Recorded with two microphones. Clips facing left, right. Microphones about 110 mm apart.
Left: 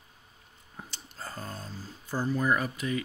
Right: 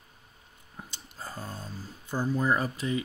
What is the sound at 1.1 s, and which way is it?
Speech, 15° right (ahead or behind).